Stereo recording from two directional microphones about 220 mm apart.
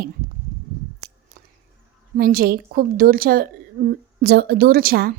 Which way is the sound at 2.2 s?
45° right (ahead or behind).